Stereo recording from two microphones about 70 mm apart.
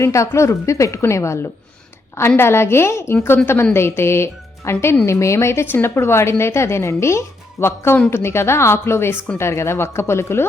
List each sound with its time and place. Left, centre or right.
0.0 s a woman's voice: left